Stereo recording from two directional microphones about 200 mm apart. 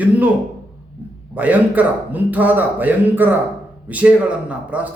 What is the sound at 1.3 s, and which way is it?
A man's voice, 10° right (ahead or behind).